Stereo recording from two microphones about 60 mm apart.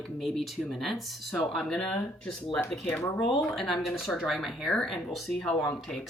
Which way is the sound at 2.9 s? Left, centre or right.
Left.